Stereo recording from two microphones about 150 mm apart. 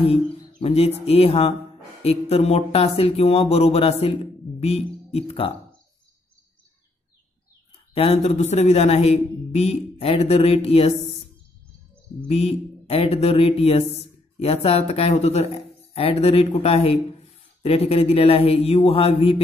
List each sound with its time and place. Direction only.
0.6 s speech: 40° left (ahead or behind)
7.9 s speech: 40° left (ahead or behind)
12.3 s speech: 40° left (ahead or behind)